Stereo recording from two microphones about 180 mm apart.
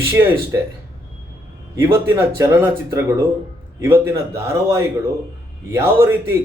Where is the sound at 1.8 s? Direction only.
15° right (ahead or behind).